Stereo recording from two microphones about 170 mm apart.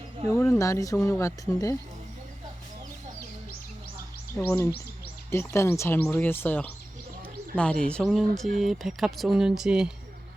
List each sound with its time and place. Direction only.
0.3 s speech: 15° left (ahead or behind)
4.4 s speech: 15° left (ahead or behind); by 9.9 s 5° right (ahead or behind)